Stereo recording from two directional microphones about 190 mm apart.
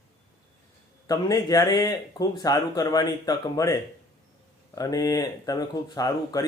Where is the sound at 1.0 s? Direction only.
20° left (ahead or behind).